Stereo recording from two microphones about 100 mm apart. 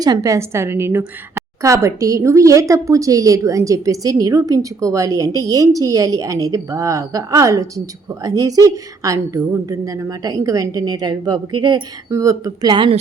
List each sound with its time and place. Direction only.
0.0 s a woman's voice: 40° right (ahead or behind)
12.1 s a woman's voice: 35° right (ahead or behind)